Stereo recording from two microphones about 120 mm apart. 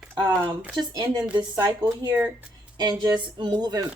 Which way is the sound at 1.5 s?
20° right (ahead or behind).